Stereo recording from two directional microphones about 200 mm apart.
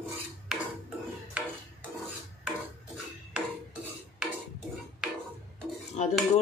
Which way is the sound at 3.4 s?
5° right (ahead or behind).